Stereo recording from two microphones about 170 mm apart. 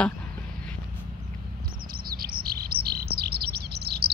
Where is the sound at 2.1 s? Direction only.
60° right (ahead or behind).